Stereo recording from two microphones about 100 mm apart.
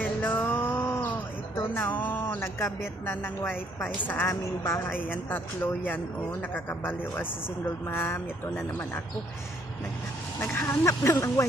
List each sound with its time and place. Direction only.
0.0 s speech: 20° left (ahead or behind)
10.4 s speech: 25° left (ahead or behind)